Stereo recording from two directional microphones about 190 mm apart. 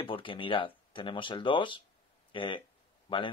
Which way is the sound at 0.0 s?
25° left (ahead or behind).